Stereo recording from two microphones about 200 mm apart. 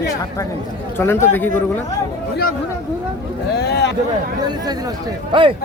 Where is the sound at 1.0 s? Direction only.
10° left (ahead or behind).